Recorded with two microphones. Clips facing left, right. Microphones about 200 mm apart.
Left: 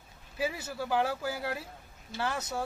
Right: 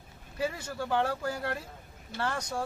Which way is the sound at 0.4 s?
5° left (ahead or behind).